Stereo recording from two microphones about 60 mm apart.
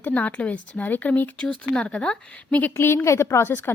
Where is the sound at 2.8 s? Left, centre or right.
Left.